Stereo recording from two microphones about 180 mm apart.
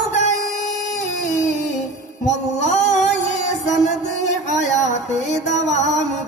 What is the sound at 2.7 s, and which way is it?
Singing, 40° left (ahead or behind).